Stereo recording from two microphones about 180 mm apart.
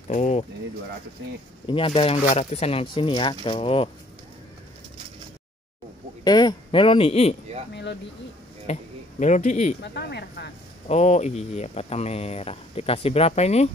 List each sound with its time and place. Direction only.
0.1 s speech: 40° left (ahead or behind)
1.7 s speech: 30° left (ahead or behind)
6.2 s speech: 25° left (ahead or behind)
8.7 s speech: 35° left (ahead or behind)
9.9 s speech: 65° left (ahead or behind)
10.9 s speech: 40° left (ahead or behind)